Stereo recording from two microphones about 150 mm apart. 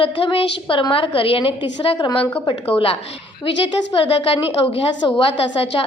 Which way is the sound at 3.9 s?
40° left (ahead or behind).